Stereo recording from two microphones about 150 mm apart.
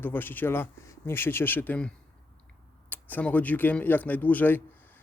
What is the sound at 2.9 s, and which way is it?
Speech, 10° left (ahead or behind).